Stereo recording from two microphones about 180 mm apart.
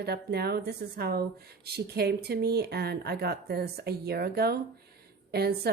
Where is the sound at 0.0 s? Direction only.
65° right (ahead or behind).